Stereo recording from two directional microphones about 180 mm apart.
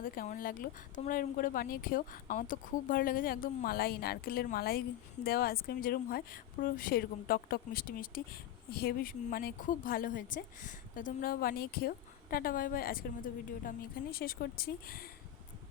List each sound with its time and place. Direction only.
0.0 s speech: 50° left (ahead or behind)